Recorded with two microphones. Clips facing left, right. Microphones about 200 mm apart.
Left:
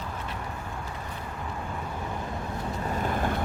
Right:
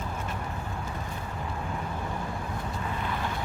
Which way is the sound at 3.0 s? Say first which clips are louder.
Left 7 dB; 50° left (ahead or behind).